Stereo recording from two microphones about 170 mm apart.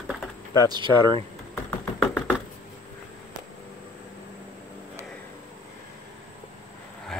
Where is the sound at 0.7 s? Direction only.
25° right (ahead or behind).